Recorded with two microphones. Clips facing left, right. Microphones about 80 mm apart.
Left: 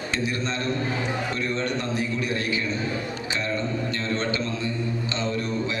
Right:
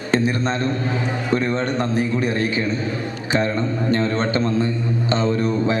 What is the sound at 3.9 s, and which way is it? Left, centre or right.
A man's voice, right.